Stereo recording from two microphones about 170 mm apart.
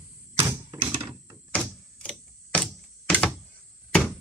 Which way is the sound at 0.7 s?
25° right (ahead or behind).